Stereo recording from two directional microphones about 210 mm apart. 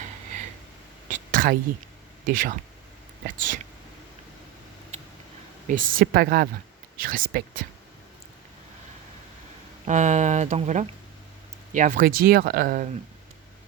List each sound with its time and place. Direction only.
1.0 s a sound: 40° right (ahead or behind)
2.2 s speech: 40° right (ahead or behind)
5.6 s speech: 40° right (ahead or behind)
9.8 s speech: 35° right (ahead or behind)